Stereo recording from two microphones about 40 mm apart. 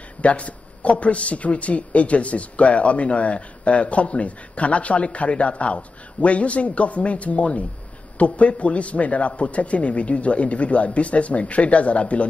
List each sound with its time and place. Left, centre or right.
0.2 s a man's voice: left